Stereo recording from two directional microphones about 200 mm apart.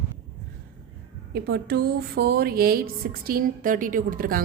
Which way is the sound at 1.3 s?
55° right (ahead or behind).